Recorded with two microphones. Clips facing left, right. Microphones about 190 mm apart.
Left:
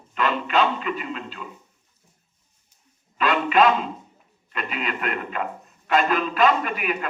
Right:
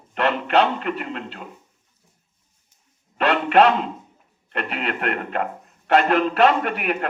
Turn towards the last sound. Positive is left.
turn(degrees=-60)  # may be behind; listen again after turning